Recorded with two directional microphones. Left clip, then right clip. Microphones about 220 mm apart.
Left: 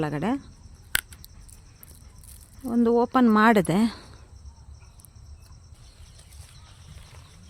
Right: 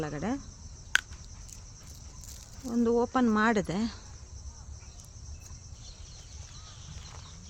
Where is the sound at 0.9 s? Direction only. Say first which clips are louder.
Even; 50° left (ahead or behind).